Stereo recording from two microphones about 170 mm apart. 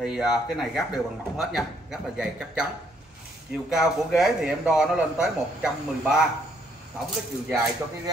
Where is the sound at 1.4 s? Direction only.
Centre (ahead or behind).